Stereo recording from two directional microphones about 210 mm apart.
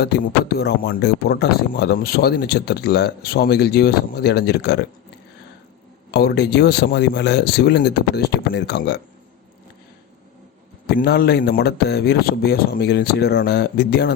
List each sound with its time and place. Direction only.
0.0 s speech: 50° left (ahead or behind)
6.1 s speech: 50° left (ahead or behind)
10.8 s speech: 50° left (ahead or behind)